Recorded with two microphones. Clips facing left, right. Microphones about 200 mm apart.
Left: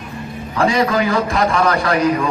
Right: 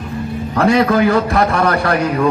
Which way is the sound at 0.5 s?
60° right (ahead or behind).